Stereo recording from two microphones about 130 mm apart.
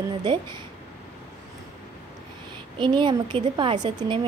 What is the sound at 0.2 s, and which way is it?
Speech, 35° right (ahead or behind).